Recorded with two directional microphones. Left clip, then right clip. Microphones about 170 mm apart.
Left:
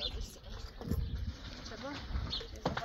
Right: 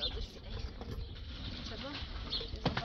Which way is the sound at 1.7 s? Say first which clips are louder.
Left 3 dB; 25° left (ahead or behind).